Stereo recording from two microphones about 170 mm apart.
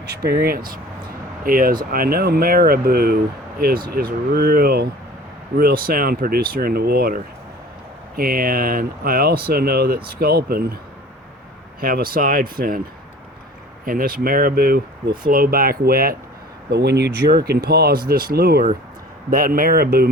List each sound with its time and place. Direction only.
0.3 s speech: 65° right (ahead or behind)
11.8 s speech: 60° right (ahead or behind)
13.8 s speech: 60° right (ahead or behind)
16.7 s speech: 75° right (ahead or behind)